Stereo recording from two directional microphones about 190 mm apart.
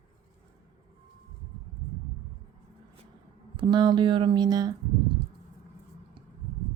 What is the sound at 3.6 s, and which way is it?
Speech, 25° right (ahead or behind).